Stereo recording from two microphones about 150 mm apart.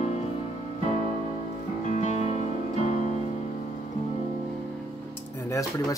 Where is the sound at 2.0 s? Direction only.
50° left (ahead or behind).